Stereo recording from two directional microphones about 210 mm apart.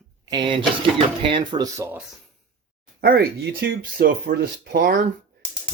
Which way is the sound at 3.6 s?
45° right (ahead or behind).